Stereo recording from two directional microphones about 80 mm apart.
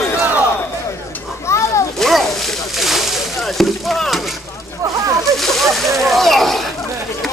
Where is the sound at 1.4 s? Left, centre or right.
Left.